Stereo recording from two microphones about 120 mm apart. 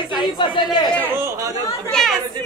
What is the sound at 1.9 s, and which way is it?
Speech, 5° left (ahead or behind).